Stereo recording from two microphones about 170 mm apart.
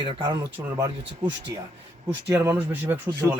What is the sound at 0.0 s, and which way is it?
Speech, 25° right (ahead or behind).